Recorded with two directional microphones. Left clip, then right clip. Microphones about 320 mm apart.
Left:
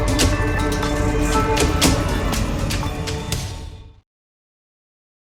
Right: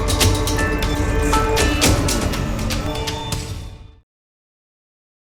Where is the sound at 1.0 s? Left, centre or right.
Centre.